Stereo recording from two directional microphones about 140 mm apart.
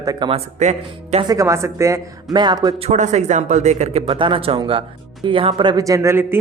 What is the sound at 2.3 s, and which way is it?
Speech, 30° right (ahead or behind).